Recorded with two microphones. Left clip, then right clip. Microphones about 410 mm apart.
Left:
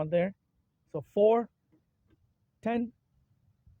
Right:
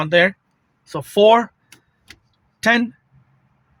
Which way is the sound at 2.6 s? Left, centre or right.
Left.